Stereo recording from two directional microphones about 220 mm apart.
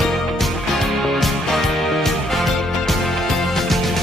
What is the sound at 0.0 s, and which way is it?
Music, centre (ahead or behind).